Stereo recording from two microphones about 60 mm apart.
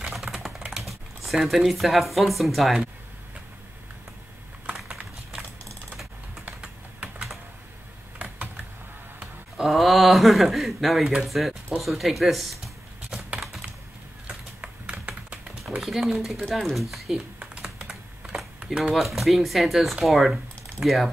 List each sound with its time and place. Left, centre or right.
0.1 s typing: centre
0.7 s speech: centre
8.2 s computer keyboard: right
9.6 s speech: centre
14.2 s a sound: centre
15.8 s speech: centre
17.4 s typing: centre
18.9 s speech: centre